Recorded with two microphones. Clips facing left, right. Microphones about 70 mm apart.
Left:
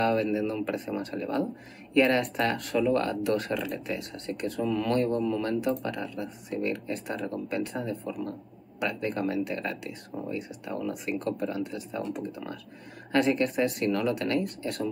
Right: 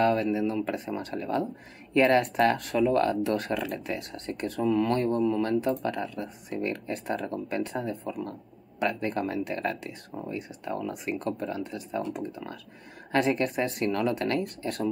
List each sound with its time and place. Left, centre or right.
0.0 s speech: right
0.9 s speech: right
8.1 s a sound: right
8.8 s speech: right